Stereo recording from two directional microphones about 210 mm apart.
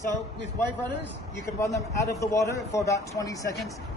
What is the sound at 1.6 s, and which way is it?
A man's voice, 15° left (ahead or behind).